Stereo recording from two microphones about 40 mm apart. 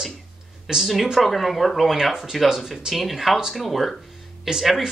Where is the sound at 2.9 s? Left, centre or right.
Centre.